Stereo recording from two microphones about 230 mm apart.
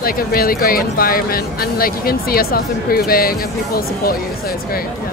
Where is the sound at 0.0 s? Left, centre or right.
Left.